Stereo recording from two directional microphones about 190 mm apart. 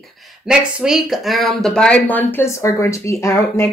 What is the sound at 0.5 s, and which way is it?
Speech, 5° right (ahead or behind).